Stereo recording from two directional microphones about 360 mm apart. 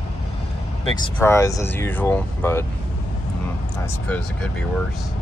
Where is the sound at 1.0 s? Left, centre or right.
Centre.